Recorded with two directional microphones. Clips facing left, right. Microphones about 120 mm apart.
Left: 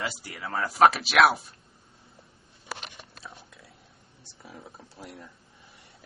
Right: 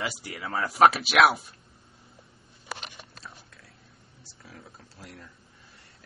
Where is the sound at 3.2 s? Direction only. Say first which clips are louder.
Left 1 dB; 10° left (ahead or behind).